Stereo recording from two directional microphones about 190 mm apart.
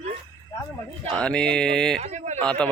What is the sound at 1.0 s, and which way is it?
Speech, 5° left (ahead or behind).